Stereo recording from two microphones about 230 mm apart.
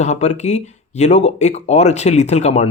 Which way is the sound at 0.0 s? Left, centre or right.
Left.